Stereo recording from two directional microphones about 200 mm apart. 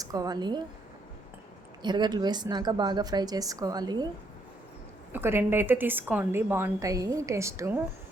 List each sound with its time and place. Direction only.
0.0 s speech: 20° right (ahead or behind)
1.8 s a woman's voice: 20° right (ahead or behind)
5.1 s a woman's voice: 10° right (ahead or behind)